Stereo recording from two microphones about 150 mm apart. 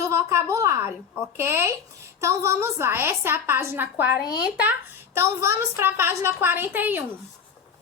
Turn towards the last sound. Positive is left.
turn(degrees=-15)  # may be behind; listen again after turning